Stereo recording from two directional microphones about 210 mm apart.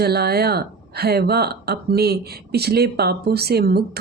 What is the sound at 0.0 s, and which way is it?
A woman's voice, 50° right (ahead or behind).